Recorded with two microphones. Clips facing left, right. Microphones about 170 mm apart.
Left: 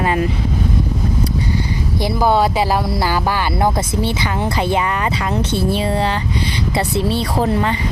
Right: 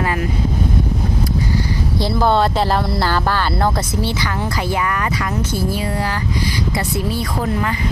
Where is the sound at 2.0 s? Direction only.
10° left (ahead or behind).